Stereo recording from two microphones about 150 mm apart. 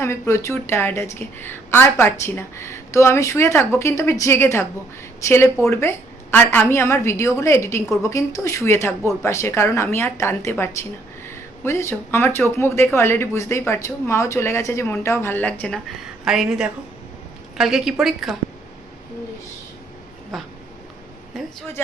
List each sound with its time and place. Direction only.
0.0 s a woman's voice: 20° left (ahead or behind); by 18.3 s centre (ahead or behind)
20.3 s a woman's voice: centre (ahead or behind)